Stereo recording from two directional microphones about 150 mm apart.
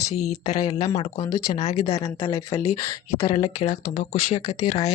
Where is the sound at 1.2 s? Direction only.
25° left (ahead or behind).